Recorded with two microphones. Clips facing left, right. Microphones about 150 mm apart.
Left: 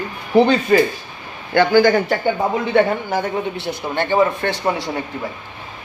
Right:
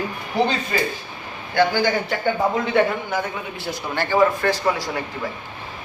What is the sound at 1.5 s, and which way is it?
Speech, 50° left (ahead or behind).